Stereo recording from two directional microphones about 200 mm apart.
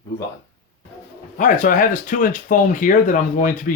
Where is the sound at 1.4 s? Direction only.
40° left (ahead or behind).